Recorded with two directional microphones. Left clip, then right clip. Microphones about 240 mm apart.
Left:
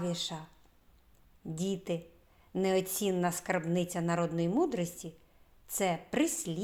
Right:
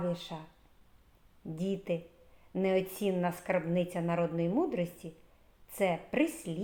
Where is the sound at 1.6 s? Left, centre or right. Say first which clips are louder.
Right 1 dB; left.